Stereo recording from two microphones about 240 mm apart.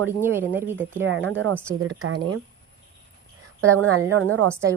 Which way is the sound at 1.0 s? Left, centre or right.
Right.